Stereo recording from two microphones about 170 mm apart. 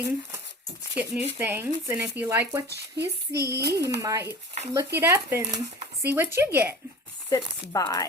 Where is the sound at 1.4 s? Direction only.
10° right (ahead or behind).